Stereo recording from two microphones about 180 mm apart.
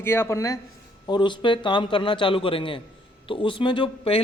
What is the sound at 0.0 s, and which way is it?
A man's voice, 15° left (ahead or behind).